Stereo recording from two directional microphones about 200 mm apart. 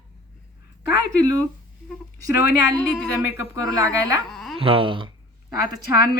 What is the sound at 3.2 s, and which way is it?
Speech, 10° right (ahead or behind).